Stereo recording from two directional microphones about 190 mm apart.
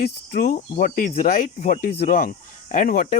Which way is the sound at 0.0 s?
50° left (ahead or behind).